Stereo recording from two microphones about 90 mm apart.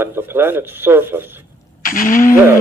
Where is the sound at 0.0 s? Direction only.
25° right (ahead or behind).